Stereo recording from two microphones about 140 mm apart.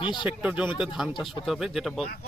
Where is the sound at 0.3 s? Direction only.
10° right (ahead or behind).